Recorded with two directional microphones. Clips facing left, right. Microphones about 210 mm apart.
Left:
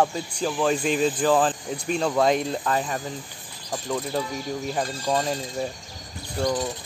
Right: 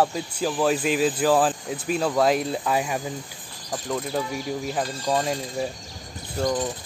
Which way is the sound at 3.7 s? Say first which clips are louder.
Even; centre (ahead or behind).